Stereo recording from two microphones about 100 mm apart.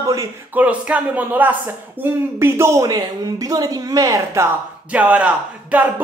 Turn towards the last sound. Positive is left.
turn(degrees=-15)  # may be behind; listen again after turning